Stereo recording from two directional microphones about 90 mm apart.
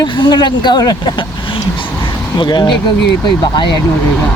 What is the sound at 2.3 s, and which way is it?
Speech, 55° left (ahead or behind).